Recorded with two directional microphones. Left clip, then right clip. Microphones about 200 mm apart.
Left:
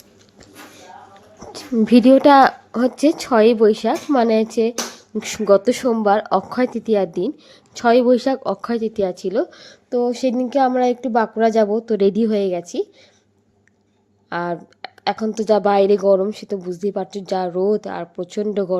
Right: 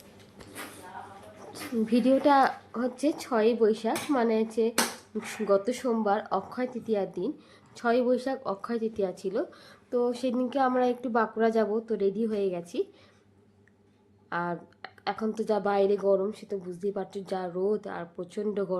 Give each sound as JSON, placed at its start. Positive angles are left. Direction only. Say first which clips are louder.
{"t": 1.8, "sound": "a woman's voice", "louder": "left 12 dB", "side_deg": 45}
{"t": 14.3, "sound": "a sound", "louder": "left 8 dB", "side_deg": 30}
{"t": 15.3, "sound": "a woman's voice", "louder": "left 12 dB", "side_deg": 30}